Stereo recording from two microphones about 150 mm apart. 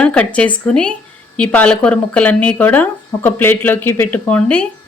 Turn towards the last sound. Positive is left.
turn(degrees=10)  # may be behind; listen again after turning